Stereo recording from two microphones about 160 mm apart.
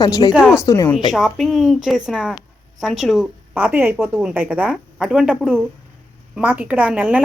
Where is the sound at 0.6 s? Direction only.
25° left (ahead or behind).